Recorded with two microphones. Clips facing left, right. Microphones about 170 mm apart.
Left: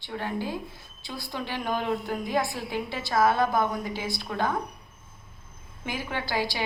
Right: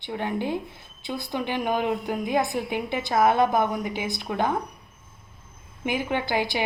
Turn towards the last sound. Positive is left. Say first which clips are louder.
# right 4 dB
turn(degrees=-20)  # may be behind; listen again after turning